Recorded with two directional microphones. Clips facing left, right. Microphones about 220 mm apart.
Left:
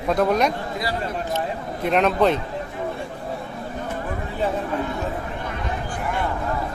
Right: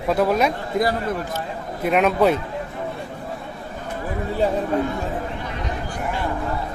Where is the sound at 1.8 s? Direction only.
5° right (ahead or behind).